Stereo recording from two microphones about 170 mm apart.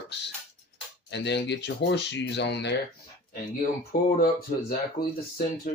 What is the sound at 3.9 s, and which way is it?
Speech, 65° left (ahead or behind).